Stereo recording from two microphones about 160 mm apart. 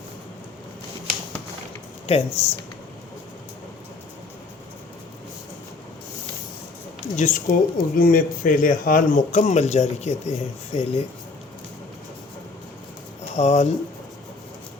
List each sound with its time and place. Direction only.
2.0 s speech: 40° left (ahead or behind)
7.2 s speech: 55° left (ahead or behind)
13.3 s speech: 45° left (ahead or behind)